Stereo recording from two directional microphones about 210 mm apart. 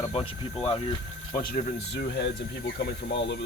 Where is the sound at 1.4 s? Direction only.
45° left (ahead or behind).